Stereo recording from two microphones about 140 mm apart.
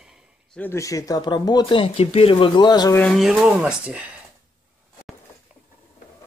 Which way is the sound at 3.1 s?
5° right (ahead or behind).